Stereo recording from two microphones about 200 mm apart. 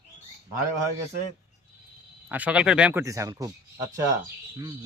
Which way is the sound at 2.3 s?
5° right (ahead or behind).